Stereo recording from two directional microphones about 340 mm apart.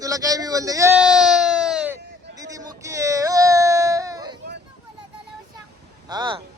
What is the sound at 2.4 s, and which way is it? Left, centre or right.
Whimper, centre.